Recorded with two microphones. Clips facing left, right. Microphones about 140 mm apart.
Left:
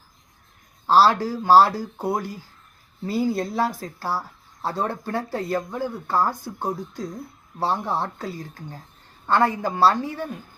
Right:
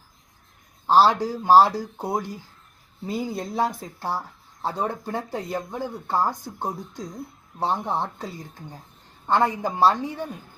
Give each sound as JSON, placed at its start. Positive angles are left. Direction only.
{"t": 0.9, "sound": "speech", "side_deg": -20}